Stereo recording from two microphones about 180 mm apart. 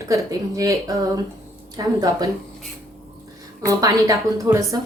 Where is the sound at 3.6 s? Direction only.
20° right (ahead or behind).